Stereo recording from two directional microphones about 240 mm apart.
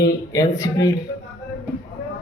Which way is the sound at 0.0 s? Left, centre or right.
Centre.